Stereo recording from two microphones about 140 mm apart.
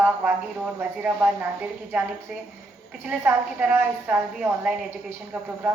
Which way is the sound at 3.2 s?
15° right (ahead or behind).